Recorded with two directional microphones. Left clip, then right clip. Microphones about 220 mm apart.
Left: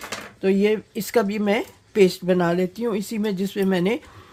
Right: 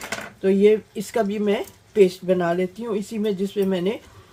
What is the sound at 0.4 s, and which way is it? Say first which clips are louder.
Speech: right 3 dB; 40° left (ahead or behind).